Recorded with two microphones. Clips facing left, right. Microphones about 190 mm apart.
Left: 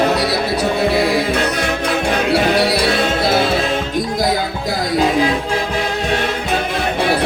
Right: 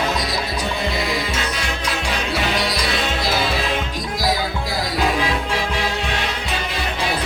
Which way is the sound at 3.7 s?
40° left (ahead or behind).